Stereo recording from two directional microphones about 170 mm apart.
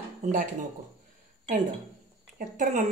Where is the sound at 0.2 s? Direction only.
45° right (ahead or behind).